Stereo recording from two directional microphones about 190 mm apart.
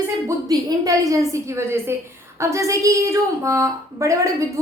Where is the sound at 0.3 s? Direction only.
20° right (ahead or behind).